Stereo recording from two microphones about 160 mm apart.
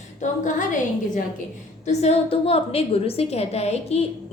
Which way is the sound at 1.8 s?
45° left (ahead or behind).